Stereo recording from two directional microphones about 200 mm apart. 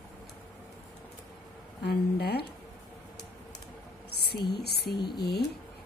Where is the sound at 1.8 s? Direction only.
55° left (ahead or behind).